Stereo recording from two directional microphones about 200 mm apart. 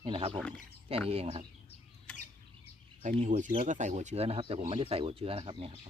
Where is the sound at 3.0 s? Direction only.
35° right (ahead or behind).